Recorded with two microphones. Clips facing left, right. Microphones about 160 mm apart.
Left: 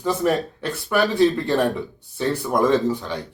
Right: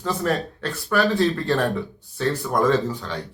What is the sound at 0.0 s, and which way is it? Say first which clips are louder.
Speech: left 3 dB; 15° left (ahead or behind).